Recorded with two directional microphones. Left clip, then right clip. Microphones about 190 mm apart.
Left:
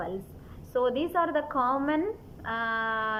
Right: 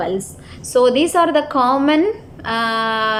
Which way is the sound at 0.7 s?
10° right (ahead or behind).